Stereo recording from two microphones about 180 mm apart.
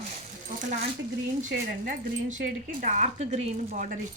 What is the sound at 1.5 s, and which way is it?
Speech, 50° right (ahead or behind).